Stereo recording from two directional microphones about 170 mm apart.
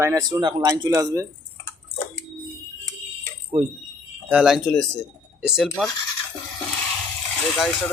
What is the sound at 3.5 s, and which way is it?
Speech, 25° right (ahead or behind).